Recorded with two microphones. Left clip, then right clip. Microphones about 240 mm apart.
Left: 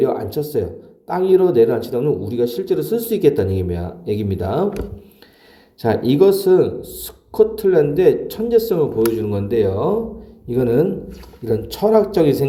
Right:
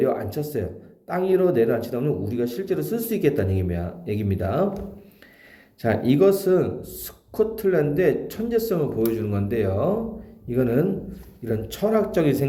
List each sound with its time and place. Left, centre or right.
0.0 s speech: centre
5.8 s speech: centre